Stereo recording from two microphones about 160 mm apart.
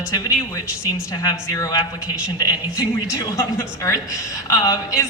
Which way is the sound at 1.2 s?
20° left (ahead or behind).